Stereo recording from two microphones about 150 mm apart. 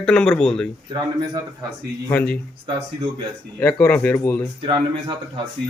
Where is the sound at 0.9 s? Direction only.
30° right (ahead or behind).